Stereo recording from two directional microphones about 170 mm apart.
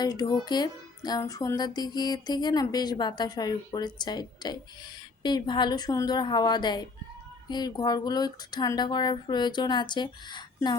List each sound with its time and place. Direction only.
0.0 s music: 20° left (ahead or behind)